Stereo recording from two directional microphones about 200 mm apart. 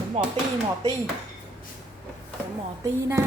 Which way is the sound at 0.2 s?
30° right (ahead or behind).